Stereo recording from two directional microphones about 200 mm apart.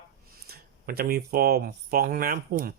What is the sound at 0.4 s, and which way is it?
Speech, 50° right (ahead or behind).